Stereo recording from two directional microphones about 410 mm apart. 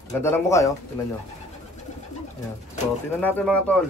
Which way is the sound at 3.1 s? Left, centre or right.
Centre.